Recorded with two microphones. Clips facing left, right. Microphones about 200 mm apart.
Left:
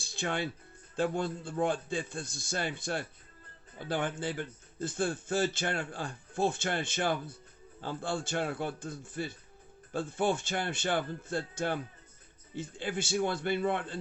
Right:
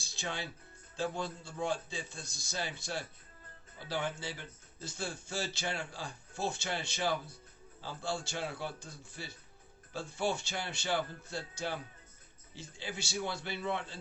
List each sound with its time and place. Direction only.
0.0 s music: 55° left (ahead or behind)
0.9 s a man's voice: 55° left (ahead or behind)